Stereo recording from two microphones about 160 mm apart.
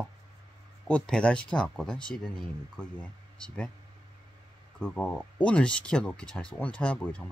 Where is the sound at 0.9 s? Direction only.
5° left (ahead or behind).